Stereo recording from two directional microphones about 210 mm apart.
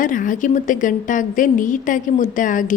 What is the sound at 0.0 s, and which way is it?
A woman's voice, 40° left (ahead or behind).